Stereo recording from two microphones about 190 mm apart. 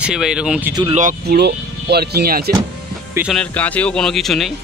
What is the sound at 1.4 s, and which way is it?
Speech, 60° right (ahead or behind).